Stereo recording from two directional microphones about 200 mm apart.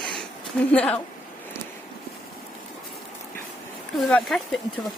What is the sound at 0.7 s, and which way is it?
Speech, 5° left (ahead or behind).